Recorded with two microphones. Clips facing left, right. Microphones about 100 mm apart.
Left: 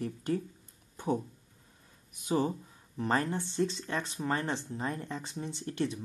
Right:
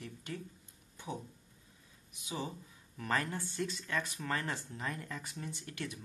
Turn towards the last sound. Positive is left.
turn(degrees=30)  # may be behind; listen again after turning